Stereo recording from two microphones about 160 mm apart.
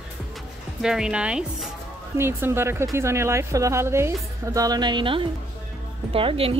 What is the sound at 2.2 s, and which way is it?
A woman's voice, 15° right (ahead or behind).